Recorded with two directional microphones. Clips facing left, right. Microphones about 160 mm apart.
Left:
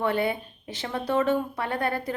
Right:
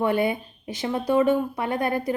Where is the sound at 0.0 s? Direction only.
15° right (ahead or behind).